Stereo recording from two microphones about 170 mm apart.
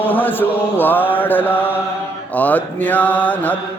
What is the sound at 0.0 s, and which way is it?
Mantra, 10° left (ahead or behind).